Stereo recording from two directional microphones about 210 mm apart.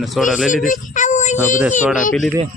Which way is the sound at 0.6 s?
40° left (ahead or behind).